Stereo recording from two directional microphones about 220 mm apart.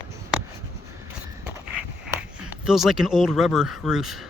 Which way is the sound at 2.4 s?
5° right (ahead or behind).